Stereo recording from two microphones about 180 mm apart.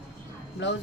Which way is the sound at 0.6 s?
90° left.